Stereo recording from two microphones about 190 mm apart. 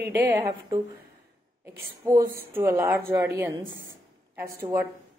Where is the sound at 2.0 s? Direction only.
15° right (ahead or behind).